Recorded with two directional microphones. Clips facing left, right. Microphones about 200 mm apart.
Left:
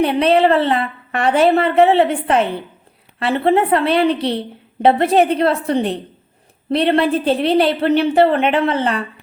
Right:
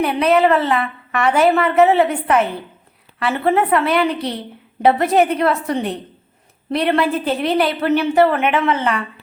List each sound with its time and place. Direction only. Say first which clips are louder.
0.0 s a woman's voice: left 1 dB; 30° left (ahead or behind)